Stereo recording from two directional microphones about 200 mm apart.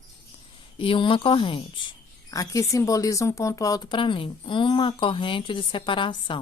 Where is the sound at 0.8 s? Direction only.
25° left (ahead or behind).